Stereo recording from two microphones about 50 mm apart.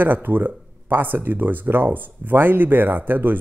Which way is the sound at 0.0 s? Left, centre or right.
Right.